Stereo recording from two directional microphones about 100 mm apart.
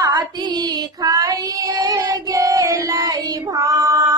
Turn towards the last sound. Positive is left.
turn(degrees=-35)  # may be behind; listen again after turning